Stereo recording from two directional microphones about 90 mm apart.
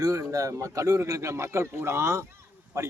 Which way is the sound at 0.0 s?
40° right (ahead or behind).